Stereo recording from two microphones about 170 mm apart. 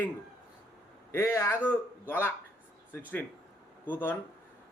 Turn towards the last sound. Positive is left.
turn(degrees=10)  # may be behind; listen again after turning